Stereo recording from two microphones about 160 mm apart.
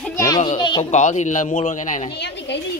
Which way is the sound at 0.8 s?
50° left (ahead or behind).